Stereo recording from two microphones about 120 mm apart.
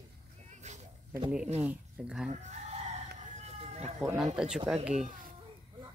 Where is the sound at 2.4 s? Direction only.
80° right.